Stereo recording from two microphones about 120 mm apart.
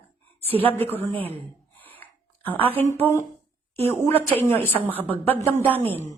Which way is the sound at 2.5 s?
15° left (ahead or behind).